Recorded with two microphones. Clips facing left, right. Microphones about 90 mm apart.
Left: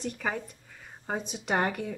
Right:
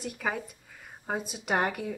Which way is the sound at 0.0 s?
5° right (ahead or behind).